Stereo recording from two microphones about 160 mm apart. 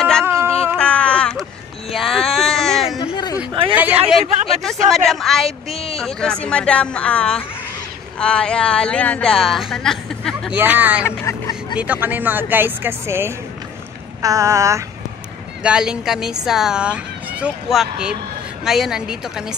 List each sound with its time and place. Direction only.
0.2 s cat: 15° right (ahead or behind)
0.7 s a sound: 5° left (ahead or behind)
3.0 s a sound: 25° left (ahead or behind)
3.7 s a man's voice: 10° right (ahead or behind)
4.6 s speech: centre (ahead or behind)
10.5 s speech: 10° right (ahead or behind)
11.1 s vehicle: 20° left (ahead or behind)
11.8 s speech: 10° right (ahead or behind)
14.2 s a sound: 20° right (ahead or behind)
15.6 s speech: 5° right (ahead or behind)